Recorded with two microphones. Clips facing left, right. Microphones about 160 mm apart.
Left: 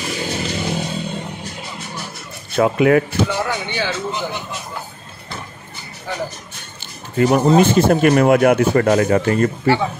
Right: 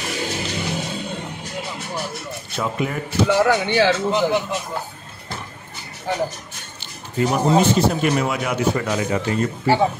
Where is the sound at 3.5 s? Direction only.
80° right.